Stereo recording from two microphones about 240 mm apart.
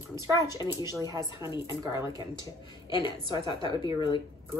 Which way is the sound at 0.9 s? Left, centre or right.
Centre.